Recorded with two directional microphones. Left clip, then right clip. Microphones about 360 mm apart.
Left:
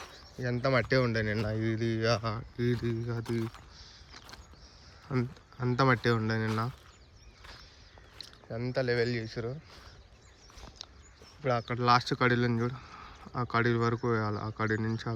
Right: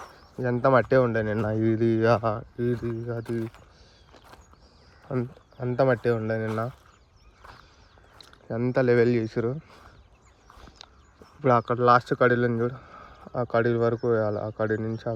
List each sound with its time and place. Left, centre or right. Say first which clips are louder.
0.0 s speech: right 7 dB; centre
5.1 s speech: right 4 dB; centre
8.2 s speech: right 8 dB; centre
10.8 s a sound: left 2 dB; centre
11.4 s speech: right 8 dB; centre